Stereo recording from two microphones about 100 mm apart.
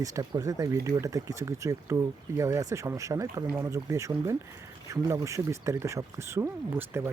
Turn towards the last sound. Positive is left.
turn(degrees=-25)  # may be behind; listen again after turning